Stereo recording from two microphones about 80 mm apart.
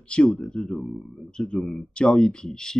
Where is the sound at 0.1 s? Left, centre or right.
Centre.